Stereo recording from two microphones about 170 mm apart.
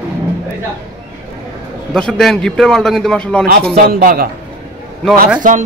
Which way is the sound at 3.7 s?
60° right (ahead or behind).